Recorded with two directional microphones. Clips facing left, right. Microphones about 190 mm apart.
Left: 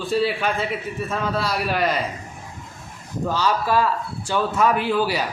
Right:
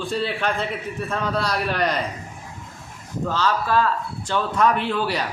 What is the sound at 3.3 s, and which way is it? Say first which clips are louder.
A man's voice: left 1 dB; 10° left (ahead or behind).